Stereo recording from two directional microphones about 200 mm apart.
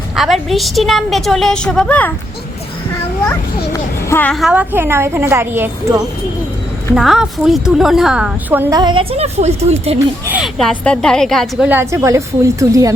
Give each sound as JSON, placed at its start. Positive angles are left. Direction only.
{"t": 0.2, "sound": "a woman's voice", "side_deg": 0}
{"t": 3.2, "sound": "a child's voice", "side_deg": 10}
{"t": 8.8, "sound": "a woman's voice", "side_deg": -25}
{"t": 10.2, "sound": "a woman's voice", "side_deg": -5}
{"t": 11.7, "sound": "a child's voice", "side_deg": -15}